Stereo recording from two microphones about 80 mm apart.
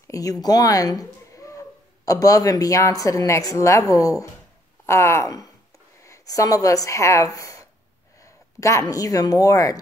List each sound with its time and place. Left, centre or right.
0.1 s speech: left
4.8 s speech: left
8.2 s a sound: left
8.8 s speech: left